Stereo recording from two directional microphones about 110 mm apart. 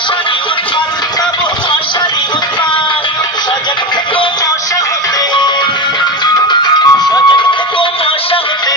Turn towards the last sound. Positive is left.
turn(degrees=45)  # may be behind; listen again after turning